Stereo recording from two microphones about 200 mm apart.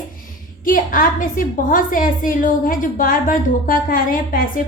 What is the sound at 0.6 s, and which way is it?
A woman's voice, 45° left (ahead or behind).